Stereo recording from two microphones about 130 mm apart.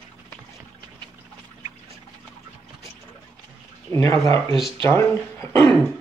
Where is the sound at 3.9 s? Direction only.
25° left (ahead or behind).